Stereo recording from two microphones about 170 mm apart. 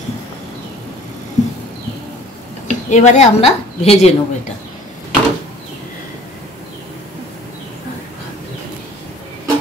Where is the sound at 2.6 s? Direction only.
45° left (ahead or behind).